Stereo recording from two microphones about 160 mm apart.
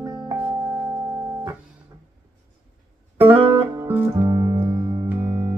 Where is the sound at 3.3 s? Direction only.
15° right (ahead or behind).